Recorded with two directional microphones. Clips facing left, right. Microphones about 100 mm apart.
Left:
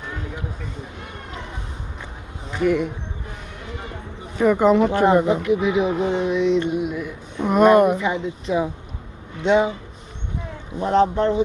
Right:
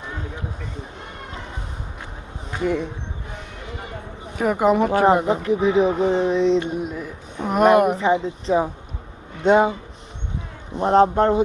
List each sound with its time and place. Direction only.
2.6 s speech: 30° right (ahead or behind)
4.4 s speech: 10° right (ahead or behind)
5.3 s speech: 35° right (ahead or behind)
7.3 s speech: 5° right (ahead or behind)
7.9 s speech: 35° right (ahead or behind)
9.4 s speech: 45° right (ahead or behind)
10.8 s speech: 40° right (ahead or behind)